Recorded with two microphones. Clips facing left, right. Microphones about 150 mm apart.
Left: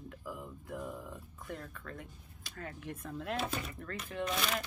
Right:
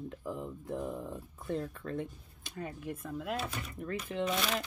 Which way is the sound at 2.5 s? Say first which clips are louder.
Right 4 dB; 10° right (ahead or behind).